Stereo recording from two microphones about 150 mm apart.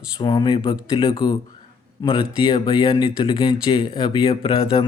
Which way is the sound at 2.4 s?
35° left (ahead or behind).